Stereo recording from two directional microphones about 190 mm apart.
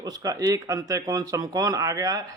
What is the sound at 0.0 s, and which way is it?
Speech, 20° right (ahead or behind).